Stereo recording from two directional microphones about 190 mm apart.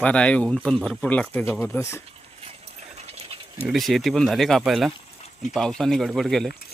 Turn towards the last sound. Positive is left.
turn(degrees=0)  # may be behind; listen again after turning